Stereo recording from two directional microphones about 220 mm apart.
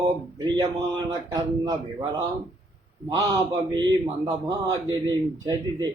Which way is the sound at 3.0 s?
15° right (ahead or behind).